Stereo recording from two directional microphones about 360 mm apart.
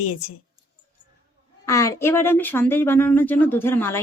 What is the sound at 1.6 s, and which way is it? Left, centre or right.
Speech, centre.